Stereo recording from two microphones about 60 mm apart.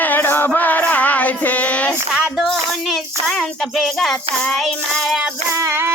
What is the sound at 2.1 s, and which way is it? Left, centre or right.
Music, centre.